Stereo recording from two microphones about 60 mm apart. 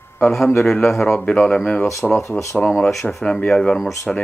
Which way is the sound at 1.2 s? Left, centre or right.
Left.